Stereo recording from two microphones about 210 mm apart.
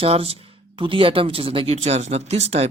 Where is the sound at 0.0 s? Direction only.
30° right (ahead or behind).